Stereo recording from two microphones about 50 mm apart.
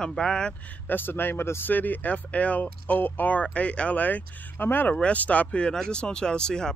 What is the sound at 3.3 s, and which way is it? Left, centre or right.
Speech, left.